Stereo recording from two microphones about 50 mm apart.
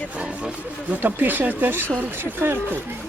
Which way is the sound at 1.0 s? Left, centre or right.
Right.